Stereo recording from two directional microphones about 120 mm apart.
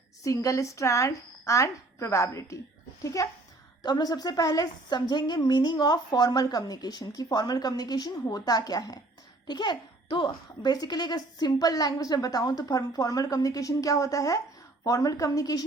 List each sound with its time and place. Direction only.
0.2 s speech: 25° left (ahead or behind)